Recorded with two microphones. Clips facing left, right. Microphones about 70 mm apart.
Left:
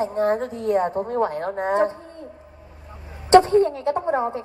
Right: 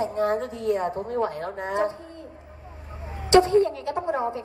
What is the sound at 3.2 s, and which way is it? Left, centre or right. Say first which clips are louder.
A woman's voice: left 3 dB; left.